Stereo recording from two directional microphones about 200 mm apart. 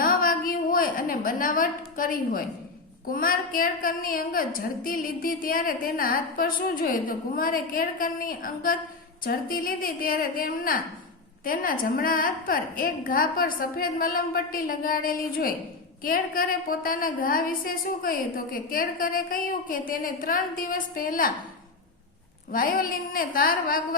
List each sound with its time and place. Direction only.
0.0 s a sound: 45° left (ahead or behind)
3.1 s a woman's voice: 45° left (ahead or behind)
22.5 s a woman's voice: 45° left (ahead or behind)